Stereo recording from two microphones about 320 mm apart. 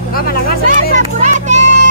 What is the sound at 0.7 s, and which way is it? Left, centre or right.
Children playing, right.